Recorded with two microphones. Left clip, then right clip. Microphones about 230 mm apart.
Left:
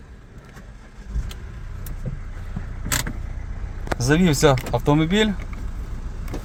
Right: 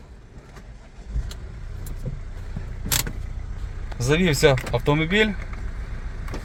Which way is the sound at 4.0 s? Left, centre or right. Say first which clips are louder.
Even; centre.